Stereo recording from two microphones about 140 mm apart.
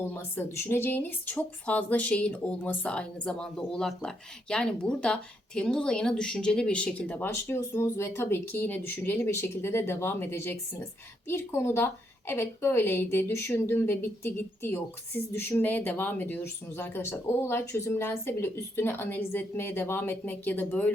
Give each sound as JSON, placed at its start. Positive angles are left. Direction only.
{"t": 0.1, "sound": "a woman's voice", "side_deg": 15}